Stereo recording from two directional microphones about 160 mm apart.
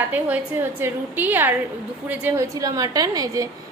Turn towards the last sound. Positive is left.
turn(degrees=-25)  # may be behind; listen again after turning